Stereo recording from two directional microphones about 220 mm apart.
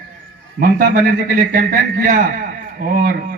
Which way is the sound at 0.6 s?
40° right (ahead or behind).